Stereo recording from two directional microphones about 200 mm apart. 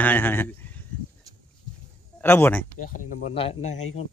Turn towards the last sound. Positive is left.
turn(degrees=30)  # may be behind; listen again after turning